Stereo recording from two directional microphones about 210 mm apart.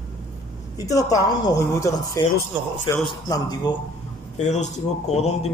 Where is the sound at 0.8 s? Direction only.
15° left (ahead or behind).